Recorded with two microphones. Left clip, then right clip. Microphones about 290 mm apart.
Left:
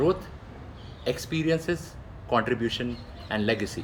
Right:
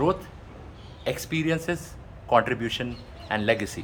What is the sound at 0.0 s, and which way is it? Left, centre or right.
Speech, centre.